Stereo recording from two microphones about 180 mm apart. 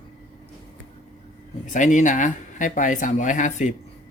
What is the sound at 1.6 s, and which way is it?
Speech, 45° left (ahead or behind).